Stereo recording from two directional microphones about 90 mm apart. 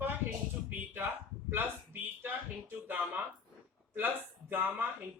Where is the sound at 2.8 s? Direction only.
20° right (ahead or behind).